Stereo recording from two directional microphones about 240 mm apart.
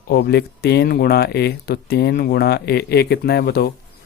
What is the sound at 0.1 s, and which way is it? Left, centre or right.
Speech, left.